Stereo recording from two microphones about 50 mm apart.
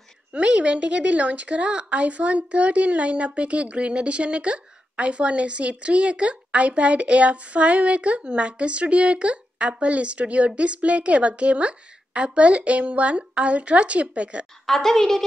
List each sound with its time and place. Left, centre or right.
0.3 s a woman's voice: right
14.7 s a woman's voice: centre